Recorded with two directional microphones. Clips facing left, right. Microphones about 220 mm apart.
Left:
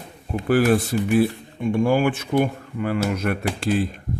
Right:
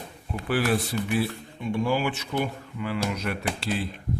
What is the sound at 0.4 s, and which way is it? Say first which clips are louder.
Speech: left 7 dB; 45° left (ahead or behind).